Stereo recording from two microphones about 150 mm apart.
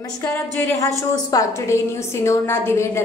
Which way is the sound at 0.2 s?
15° left (ahead or behind).